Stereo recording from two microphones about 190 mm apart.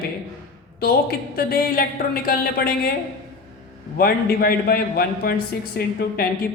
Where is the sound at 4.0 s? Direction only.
50° left (ahead or behind).